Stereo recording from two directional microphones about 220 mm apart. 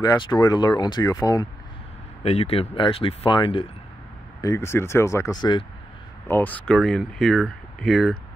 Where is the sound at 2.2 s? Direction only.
30° left (ahead or behind).